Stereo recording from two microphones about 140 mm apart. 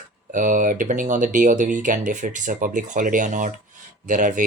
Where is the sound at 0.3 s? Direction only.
65° right (ahead or behind).